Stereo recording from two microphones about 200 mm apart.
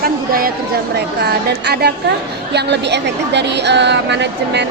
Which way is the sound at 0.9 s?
55° right (ahead or behind).